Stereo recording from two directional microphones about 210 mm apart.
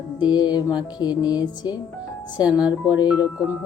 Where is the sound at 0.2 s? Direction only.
20° left (ahead or behind).